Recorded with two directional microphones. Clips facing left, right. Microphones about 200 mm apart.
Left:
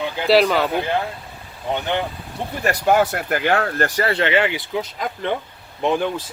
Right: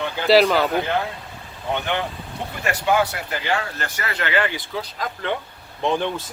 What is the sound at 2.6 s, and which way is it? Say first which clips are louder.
Speech: left 3 dB; 45° left (ahead or behind).